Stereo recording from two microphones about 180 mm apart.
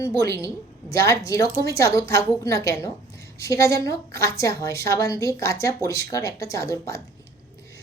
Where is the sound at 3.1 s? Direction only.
60° right (ahead or behind).